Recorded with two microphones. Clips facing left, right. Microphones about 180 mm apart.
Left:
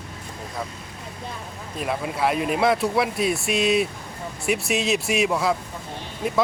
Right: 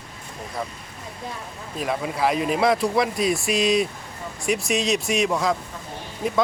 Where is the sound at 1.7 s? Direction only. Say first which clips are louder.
Right 1 dB; centre (ahead or behind).